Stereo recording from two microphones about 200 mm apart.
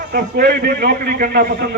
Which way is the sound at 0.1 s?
45° right (ahead or behind).